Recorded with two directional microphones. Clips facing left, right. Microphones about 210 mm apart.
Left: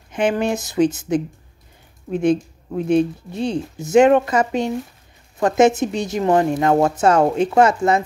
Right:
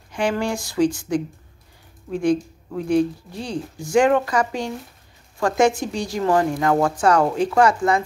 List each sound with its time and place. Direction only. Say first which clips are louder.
0.1 s speech: left 3 dB; 20° left (ahead or behind)